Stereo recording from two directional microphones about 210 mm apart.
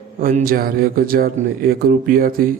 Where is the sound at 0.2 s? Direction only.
45° right (ahead or behind).